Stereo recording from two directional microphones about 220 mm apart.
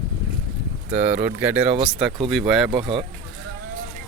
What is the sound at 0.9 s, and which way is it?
Speech, 5° right (ahead or behind).